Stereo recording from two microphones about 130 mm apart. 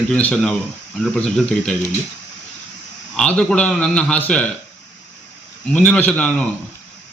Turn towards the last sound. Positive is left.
turn(degrees=10)  # may be behind; listen again after turning